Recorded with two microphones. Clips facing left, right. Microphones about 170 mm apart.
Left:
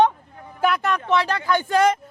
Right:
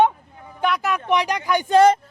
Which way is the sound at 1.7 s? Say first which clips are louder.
Right 5 dB; 30° right (ahead or behind).